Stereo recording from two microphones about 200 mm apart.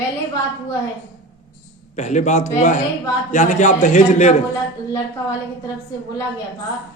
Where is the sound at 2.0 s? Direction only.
35° left (ahead or behind).